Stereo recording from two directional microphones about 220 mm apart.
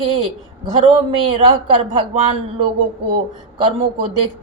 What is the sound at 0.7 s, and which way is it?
Speech, 20° right (ahead or behind).